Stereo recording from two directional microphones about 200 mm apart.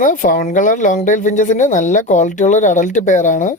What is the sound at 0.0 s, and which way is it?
Speech, 40° left (ahead or behind).